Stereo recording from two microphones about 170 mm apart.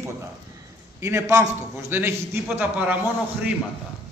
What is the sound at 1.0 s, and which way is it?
A man's voice, 15° right (ahead or behind).